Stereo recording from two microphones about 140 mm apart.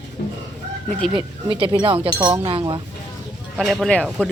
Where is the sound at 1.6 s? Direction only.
40° right (ahead or behind).